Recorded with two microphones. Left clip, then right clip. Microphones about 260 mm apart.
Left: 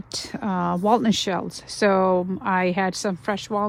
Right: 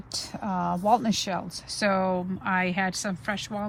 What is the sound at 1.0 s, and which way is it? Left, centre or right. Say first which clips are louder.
A woman's voice: left 5 dB; left.